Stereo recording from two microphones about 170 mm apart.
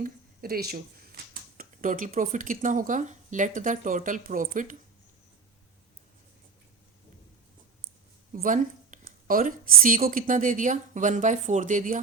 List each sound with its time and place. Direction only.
0.0 s speech: 60° right (ahead or behind)
8.3 s a woman's voice: 50° right (ahead or behind)